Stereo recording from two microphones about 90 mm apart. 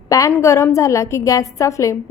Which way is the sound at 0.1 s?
35° left (ahead or behind).